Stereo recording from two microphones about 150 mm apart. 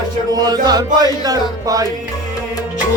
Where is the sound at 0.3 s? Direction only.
25° right (ahead or behind).